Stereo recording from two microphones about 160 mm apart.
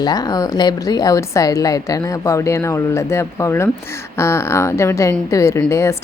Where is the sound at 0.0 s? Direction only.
25° left (ahead or behind).